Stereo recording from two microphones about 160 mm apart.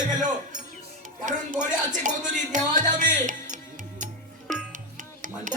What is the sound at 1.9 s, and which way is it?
Speech, 50° right (ahead or behind).